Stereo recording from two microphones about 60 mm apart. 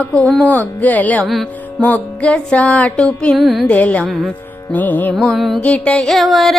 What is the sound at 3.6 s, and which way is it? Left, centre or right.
Mantra, left.